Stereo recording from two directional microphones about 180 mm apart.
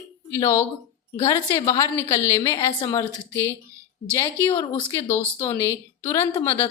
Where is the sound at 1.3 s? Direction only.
20° left (ahead or behind).